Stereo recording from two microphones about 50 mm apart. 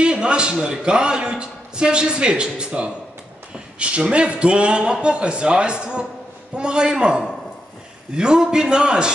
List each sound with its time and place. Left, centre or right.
0.0 s a man's voice: centre